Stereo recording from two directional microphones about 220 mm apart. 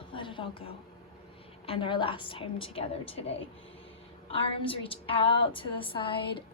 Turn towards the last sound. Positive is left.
turn(degrees=25)  # may be behind; listen again after turning